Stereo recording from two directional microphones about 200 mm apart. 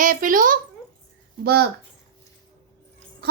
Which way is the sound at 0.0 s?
40° right (ahead or behind).